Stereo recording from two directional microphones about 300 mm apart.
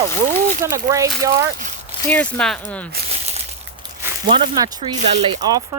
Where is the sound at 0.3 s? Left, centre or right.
Right.